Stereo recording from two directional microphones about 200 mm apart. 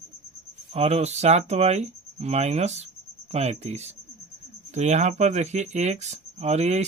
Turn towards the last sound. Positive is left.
turn(degrees=-35)  # may be behind; listen again after turning